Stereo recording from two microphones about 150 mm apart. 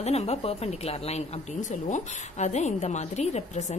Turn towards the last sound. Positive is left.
turn(degrees=50)  # may be behind; listen again after turning